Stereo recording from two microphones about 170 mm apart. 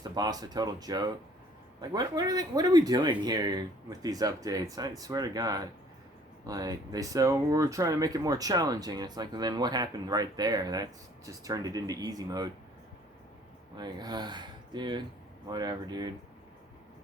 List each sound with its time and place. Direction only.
0.0 s speech: 25° right (ahead or behind)
13.7 s speech: 25° right (ahead or behind)